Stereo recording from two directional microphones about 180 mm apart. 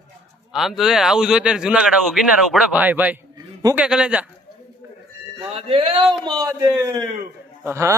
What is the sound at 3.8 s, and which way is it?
Speech, 5° right (ahead or behind).